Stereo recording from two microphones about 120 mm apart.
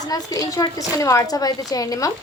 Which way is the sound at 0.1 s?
30° left (ahead or behind).